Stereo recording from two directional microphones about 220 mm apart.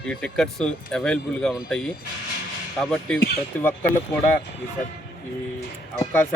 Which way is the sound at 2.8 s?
5° left (ahead or behind).